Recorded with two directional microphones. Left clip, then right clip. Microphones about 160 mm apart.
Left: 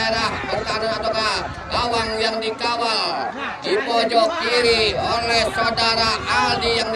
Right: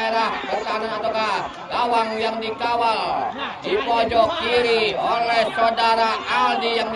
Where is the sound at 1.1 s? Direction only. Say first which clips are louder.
Left 1 dB; 30° right (ahead or behind).